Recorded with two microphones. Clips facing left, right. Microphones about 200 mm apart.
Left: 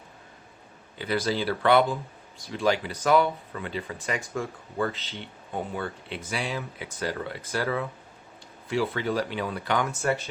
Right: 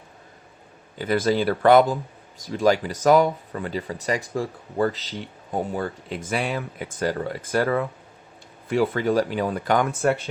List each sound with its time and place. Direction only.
0.9 s speech: 50° right (ahead or behind)